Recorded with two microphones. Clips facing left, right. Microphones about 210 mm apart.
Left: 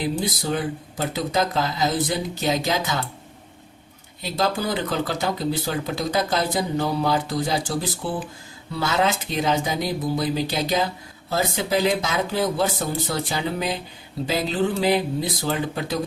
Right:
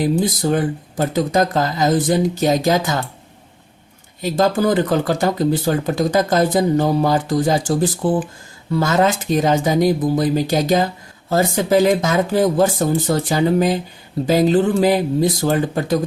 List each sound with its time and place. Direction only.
0.0 s speech: 45° right (ahead or behind)
4.2 s speech: 45° right (ahead or behind)